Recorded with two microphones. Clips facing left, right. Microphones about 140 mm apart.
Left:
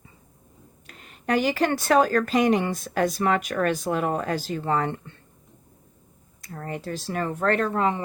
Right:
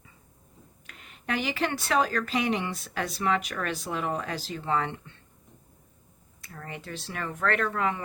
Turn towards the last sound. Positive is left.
turn(degrees=30)  # may be behind; listen again after turning